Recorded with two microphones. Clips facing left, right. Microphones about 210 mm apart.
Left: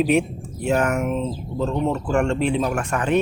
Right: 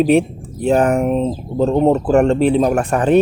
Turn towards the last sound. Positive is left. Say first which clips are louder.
# right 7 dB
turn(degrees=-35)  # may be behind; listen again after turning